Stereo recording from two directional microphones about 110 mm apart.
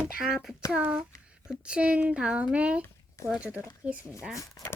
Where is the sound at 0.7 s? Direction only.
15° right (ahead or behind).